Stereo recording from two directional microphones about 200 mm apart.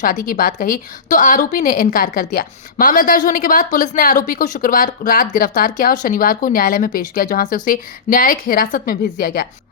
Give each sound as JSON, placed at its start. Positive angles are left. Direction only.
{"t": 0.0, "sound": "a woman's voice", "side_deg": 45}